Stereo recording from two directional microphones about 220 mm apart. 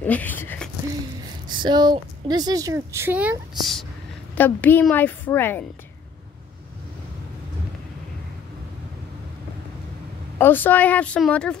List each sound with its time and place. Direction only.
0.0 s a sound: 10° left (ahead or behind)
1.5 s a woman's voice: 20° right (ahead or behind); by 5.7 s 10° left (ahead or behind)
10.4 s a woman's voice: 10° left (ahead or behind)